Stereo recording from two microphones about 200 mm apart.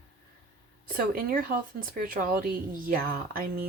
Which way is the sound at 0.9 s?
45° right (ahead or behind).